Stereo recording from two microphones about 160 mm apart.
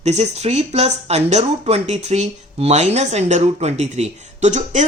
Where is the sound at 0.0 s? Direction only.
45° right (ahead or behind).